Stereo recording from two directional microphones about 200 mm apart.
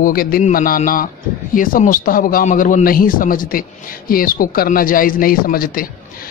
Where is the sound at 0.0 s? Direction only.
45° left (ahead or behind).